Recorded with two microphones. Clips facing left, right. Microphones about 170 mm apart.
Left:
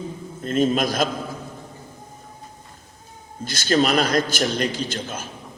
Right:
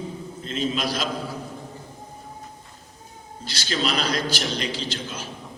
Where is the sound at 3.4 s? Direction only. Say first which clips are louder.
Left 7 dB; 50° left (ahead or behind).